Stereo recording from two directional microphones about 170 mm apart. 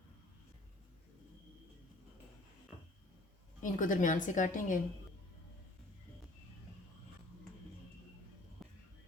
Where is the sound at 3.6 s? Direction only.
50° left (ahead or behind).